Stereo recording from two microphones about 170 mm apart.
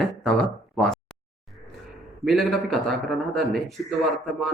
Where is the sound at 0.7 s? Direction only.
Centre (ahead or behind).